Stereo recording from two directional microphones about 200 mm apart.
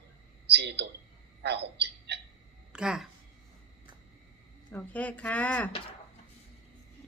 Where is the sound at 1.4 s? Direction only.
55° right (ahead or behind).